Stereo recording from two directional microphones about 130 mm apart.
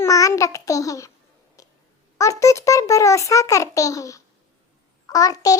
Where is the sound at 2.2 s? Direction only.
25° left (ahead or behind).